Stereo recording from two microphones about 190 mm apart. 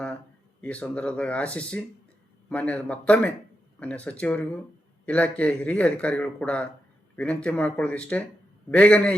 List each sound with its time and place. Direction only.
0.6 s a man's voice: 5° left (ahead or behind)